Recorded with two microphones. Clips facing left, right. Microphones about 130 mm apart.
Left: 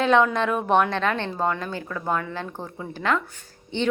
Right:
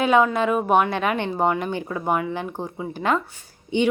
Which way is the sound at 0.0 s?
5° right (ahead or behind).